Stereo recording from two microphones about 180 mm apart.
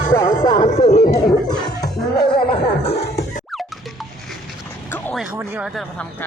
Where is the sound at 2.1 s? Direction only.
25° left (ahead or behind).